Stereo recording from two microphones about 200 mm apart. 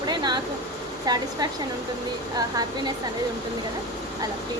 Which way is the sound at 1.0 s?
20° right (ahead or behind).